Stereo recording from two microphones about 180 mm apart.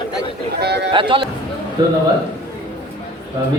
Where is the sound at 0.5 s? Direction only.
65° right (ahead or behind).